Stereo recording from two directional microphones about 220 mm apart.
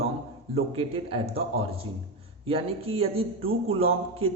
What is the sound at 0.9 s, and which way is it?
A man's voice, 25° right (ahead or behind).